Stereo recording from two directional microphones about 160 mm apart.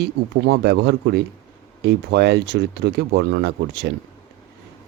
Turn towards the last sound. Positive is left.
turn(degrees=-90)